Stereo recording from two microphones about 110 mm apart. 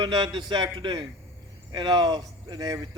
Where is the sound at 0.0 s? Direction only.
40° right (ahead or behind).